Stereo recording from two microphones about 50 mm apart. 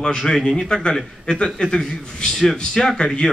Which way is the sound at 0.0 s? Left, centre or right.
Centre.